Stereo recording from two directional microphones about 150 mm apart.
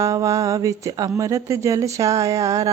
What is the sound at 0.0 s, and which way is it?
Speech, 20° right (ahead or behind).